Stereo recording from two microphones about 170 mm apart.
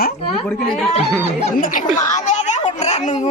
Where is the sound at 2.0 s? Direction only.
45° left (ahead or behind).